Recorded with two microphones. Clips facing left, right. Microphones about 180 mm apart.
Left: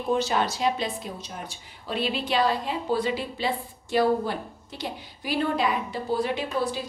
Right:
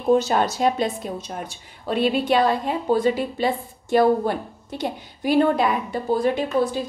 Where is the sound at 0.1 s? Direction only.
45° right (ahead or behind).